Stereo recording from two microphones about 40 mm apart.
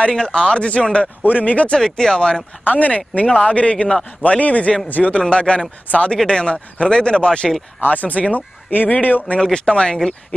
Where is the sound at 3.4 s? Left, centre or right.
Left.